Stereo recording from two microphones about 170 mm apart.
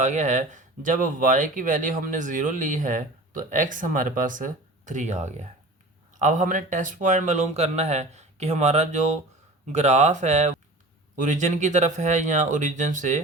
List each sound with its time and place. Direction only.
0.0 s speech: 45° right (ahead or behind)